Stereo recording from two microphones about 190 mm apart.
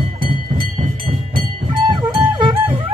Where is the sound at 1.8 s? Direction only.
25° right (ahead or behind).